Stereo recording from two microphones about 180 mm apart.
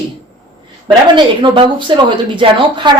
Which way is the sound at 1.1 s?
25° right (ahead or behind).